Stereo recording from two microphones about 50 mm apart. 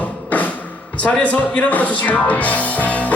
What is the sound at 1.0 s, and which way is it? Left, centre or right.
Speech, left.